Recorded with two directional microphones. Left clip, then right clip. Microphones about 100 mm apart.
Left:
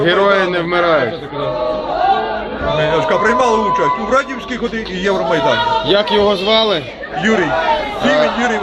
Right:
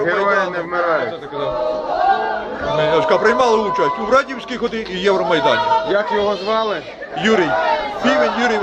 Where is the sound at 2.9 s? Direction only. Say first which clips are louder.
Even; 10° right (ahead or behind).